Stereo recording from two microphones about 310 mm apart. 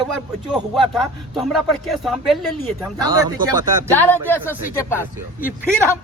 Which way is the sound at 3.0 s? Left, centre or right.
Centre.